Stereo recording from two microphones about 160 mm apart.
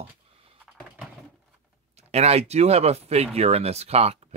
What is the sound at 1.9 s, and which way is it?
Speech, 40° right (ahead or behind).